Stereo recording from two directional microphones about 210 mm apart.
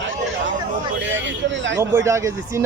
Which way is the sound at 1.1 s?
60° right (ahead or behind).